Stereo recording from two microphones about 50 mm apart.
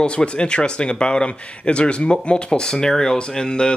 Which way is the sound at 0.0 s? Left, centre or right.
Left.